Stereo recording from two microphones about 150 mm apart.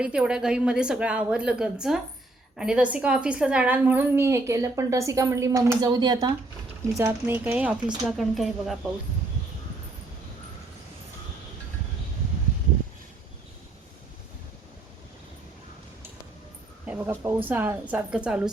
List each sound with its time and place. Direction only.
0.0 s a woman's voice: 5° right (ahead or behind); by 6.3 s 30° right (ahead or behind)
6.9 s a woman's voice: 15° right (ahead or behind); by 8.8 s centre (ahead or behind)
16.8 s a woman's voice: 10° right (ahead or behind)